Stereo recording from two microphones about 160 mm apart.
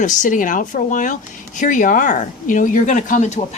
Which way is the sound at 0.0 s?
50° left (ahead or behind).